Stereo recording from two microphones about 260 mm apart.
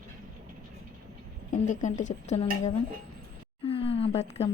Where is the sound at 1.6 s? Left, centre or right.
Left.